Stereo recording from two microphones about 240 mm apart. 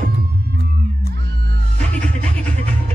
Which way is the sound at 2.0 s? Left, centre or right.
Centre.